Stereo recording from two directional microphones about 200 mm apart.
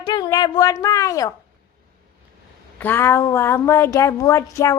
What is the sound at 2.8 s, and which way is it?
Speech, 10° left (ahead or behind).